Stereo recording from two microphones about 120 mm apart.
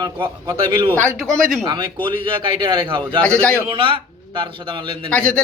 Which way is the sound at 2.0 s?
45° right (ahead or behind).